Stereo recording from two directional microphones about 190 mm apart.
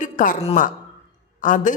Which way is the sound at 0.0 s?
45° left (ahead or behind).